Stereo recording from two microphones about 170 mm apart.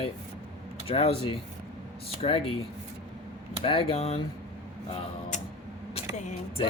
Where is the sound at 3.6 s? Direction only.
30° left (ahead or behind).